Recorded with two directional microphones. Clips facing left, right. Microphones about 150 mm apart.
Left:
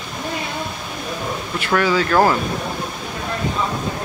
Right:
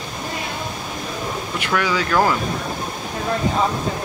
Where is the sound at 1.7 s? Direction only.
40° left (ahead or behind).